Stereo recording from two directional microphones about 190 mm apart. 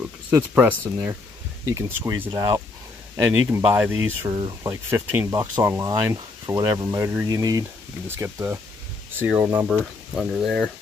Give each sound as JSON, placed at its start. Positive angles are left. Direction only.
{"t": 0.3, "sound": "speech", "side_deg": -10}
{"t": 4.2, "sound": "speech", "side_deg": -20}
{"t": 9.7, "sound": "speech", "side_deg": 0}